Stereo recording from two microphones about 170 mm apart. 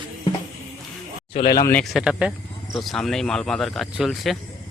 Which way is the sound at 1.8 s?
Centre (ahead or behind).